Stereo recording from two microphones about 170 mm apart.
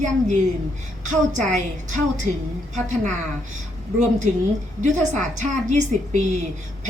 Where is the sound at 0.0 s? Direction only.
45° right (ahead or behind).